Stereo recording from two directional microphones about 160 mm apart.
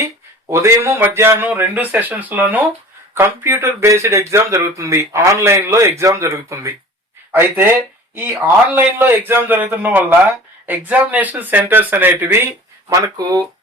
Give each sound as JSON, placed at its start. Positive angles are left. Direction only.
{"t": 0.0, "sound": "speech", "side_deg": -20}